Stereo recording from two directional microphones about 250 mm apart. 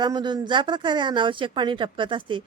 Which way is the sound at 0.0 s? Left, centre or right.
Centre.